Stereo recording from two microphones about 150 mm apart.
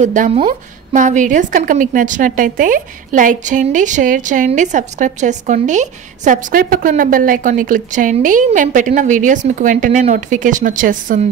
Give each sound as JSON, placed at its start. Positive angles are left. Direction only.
{"t": 0.0, "sound": "a woman's voice", "side_deg": -60}